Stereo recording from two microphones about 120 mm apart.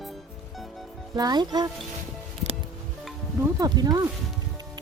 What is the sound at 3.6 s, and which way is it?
Speech, 30° right (ahead or behind).